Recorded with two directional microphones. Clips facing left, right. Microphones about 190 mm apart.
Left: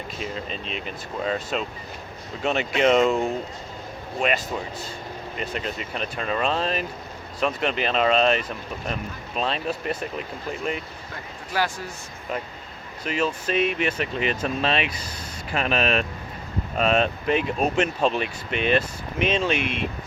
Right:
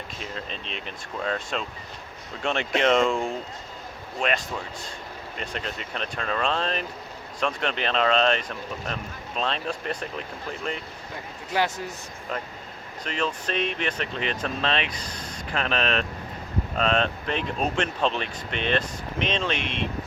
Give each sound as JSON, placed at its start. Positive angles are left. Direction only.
{"t": 0.2, "sound": "speech", "side_deg": 5}
{"t": 11.5, "sound": "speech", "side_deg": -20}
{"t": 13.1, "sound": "speech", "side_deg": 5}